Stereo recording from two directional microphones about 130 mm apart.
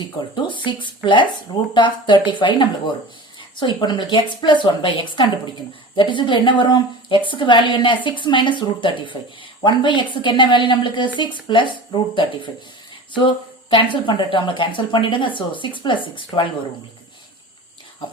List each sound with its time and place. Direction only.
0.2 s a woman's voice: 40° left (ahead or behind)